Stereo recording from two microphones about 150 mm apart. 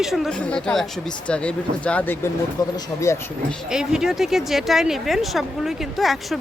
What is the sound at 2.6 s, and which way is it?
Speech, 25° left (ahead or behind).